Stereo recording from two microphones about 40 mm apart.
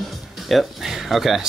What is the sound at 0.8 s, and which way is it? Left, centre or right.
Speech, centre.